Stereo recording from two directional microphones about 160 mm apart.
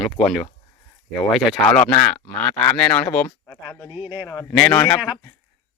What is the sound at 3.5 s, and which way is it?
Speech, 20° left (ahead or behind).